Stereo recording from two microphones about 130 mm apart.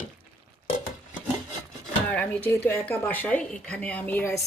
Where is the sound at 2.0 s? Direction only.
10° left (ahead or behind).